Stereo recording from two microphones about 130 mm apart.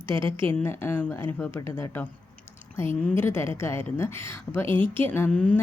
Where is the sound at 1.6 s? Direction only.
20° left (ahead or behind).